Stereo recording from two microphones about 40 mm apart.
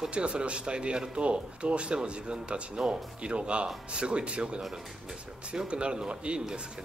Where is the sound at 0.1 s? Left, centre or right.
Right.